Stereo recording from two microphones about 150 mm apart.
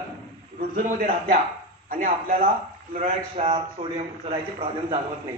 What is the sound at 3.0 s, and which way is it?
A man's voice, 50° right (ahead or behind).